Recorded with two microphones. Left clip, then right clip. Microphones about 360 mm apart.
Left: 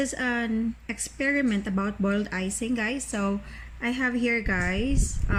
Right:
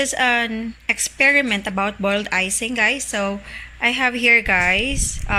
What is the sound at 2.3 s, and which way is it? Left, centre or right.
Speech, centre.